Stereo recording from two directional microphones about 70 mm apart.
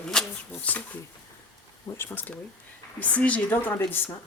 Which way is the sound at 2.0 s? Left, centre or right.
Left.